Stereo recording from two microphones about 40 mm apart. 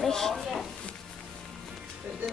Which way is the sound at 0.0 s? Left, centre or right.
Centre.